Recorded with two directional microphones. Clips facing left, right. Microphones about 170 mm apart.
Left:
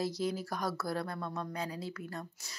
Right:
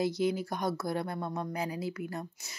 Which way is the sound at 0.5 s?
20° right (ahead or behind).